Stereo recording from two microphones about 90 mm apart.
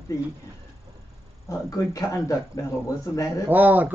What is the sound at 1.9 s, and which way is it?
Speech, 40° left (ahead or behind).